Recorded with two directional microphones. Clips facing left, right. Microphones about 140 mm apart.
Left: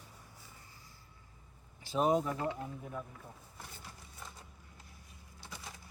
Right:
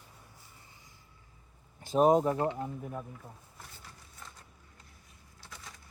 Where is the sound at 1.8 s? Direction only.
45° right (ahead or behind).